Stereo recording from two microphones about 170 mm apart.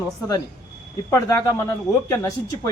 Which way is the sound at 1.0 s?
20° left (ahead or behind).